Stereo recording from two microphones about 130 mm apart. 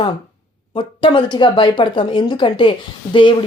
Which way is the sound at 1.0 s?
40° left (ahead or behind).